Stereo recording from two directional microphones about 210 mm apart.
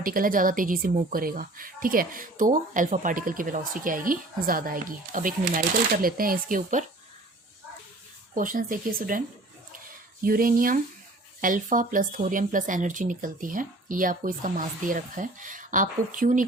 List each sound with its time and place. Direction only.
0.0 s a woman's voice: 40° right (ahead or behind)
8.4 s a woman's voice: 40° right (ahead or behind)
10.2 s a woman's voice: 40° right (ahead or behind)